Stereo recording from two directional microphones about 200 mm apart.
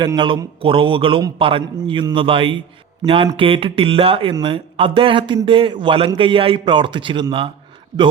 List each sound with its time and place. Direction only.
0.0 s speech: 20° right (ahead or behind)